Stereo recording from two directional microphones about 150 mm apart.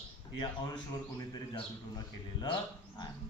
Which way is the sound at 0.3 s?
30° left (ahead or behind).